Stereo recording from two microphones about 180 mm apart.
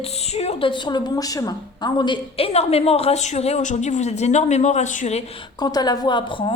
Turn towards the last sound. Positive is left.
turn(degrees=25)  # may be behind; listen again after turning